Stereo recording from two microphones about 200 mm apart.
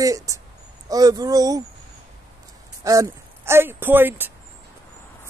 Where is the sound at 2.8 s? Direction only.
15° right (ahead or behind).